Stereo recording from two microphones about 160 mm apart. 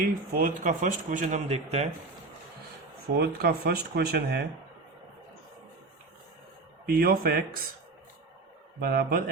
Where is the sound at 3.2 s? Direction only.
90° right.